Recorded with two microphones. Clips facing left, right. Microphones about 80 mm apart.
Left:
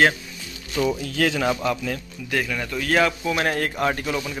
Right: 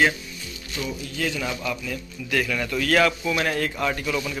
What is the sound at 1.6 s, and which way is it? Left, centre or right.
Speech, left.